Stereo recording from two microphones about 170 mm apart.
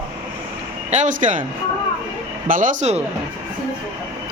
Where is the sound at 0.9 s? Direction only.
45° right (ahead or behind).